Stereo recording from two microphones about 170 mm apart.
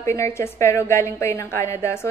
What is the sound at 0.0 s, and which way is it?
A woman's voice, 15° left (ahead or behind).